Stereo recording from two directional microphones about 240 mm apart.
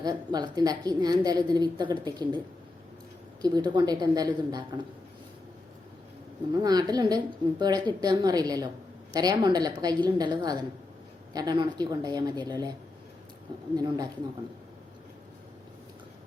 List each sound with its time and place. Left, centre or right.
0.0 s a woman's voice: centre
3.4 s a woman's voice: centre
6.5 s a woman's voice: centre
13.7 s a woman's voice: centre